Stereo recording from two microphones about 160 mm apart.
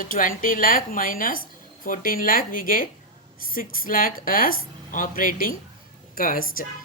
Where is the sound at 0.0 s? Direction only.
60° left (ahead or behind).